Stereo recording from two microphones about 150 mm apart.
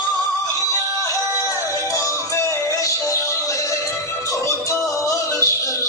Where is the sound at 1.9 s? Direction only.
20° left (ahead or behind).